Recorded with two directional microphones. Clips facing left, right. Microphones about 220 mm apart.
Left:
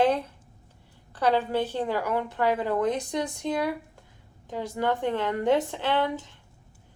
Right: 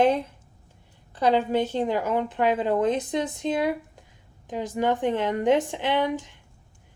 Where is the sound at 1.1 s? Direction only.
15° right (ahead or behind).